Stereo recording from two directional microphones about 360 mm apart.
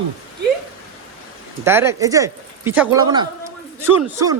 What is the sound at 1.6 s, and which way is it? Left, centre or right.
Speech, centre.